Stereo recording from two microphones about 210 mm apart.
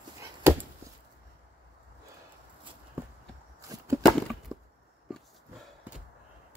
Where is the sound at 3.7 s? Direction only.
15° right (ahead or behind).